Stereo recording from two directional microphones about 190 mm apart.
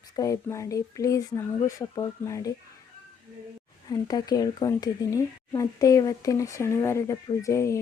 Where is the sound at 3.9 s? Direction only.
20° left (ahead or behind).